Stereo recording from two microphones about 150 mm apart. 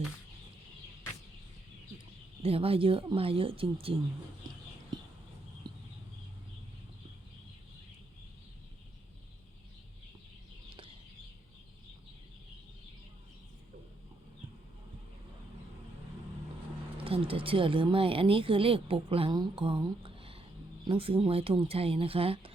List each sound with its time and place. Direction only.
2.4 s speech: 40° right (ahead or behind)
17.0 s speech: 40° right (ahead or behind)